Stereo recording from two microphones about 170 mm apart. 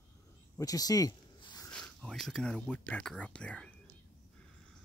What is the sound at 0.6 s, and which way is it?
Zipper, 20° left (ahead or behind).